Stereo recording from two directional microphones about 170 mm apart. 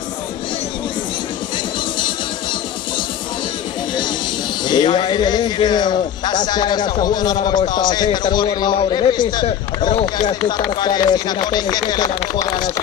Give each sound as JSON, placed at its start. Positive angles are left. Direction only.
{"t": 4.6, "sound": "a man's voice", "side_deg": 25}